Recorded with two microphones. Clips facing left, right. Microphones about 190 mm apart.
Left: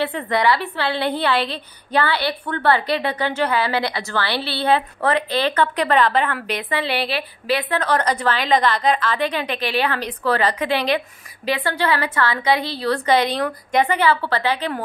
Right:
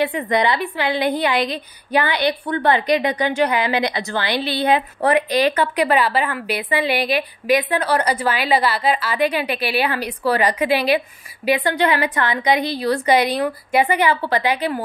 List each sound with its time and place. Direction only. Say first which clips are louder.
0.0 s a woman's voice: right 1 dB; 15° right (ahead or behind)